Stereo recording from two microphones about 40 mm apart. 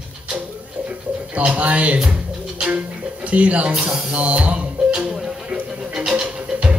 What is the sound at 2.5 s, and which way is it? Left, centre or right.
Music, right.